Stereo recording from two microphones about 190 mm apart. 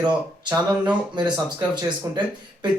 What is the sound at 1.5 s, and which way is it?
Speech, 25° right (ahead or behind).